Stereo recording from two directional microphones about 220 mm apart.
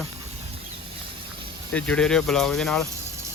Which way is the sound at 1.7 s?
5° left (ahead or behind).